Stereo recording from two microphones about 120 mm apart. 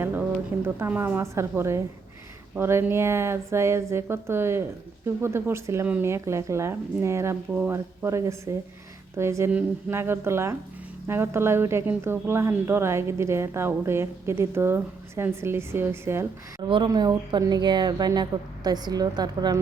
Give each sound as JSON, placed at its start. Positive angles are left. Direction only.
{"t": 0.6, "sound": "a woman's voice", "side_deg": -20}
{"t": 16.6, "sound": "speech", "side_deg": -45}